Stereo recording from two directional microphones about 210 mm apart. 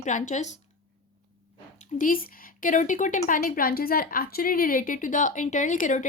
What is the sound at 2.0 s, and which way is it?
Speech, 40° left (ahead or behind).